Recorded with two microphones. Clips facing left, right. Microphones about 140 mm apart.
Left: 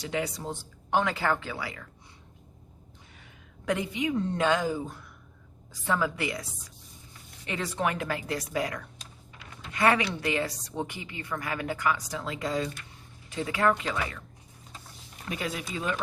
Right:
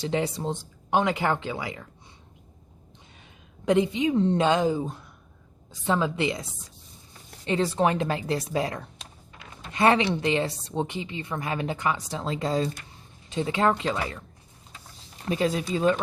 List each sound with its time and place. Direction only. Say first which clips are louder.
0.0 s a woman's voice: right 5 dB; 30° right (ahead or behind)
3.7 s a woman's voice: right 6 dB; 25° right (ahead or behind)
15.3 s a woman's voice: right 9 dB; 30° right (ahead or behind)